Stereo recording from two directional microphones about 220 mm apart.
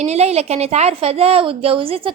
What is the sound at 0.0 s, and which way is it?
Speech, 30° right (ahead or behind).